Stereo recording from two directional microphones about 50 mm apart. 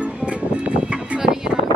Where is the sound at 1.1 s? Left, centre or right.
Centre.